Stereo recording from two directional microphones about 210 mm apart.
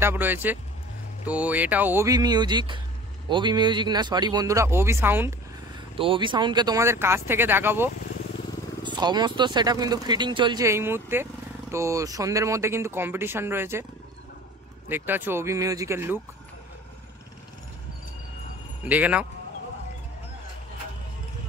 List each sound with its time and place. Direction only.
0.0 s speech: 10° right (ahead or behind)
5.9 s speech: 25° right (ahead or behind)
8.8 s speech: 20° right (ahead or behind)
14.9 s speech: 10° right (ahead or behind)
18.9 s speech: 5° right (ahead or behind)